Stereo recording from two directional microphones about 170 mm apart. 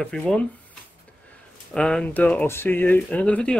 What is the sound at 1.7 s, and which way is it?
Speech, 5° left (ahead or behind).